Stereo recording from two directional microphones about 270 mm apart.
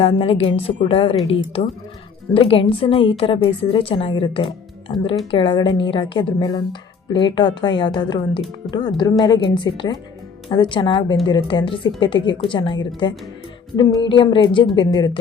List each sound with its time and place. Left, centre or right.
0.0 s a woman's voice: left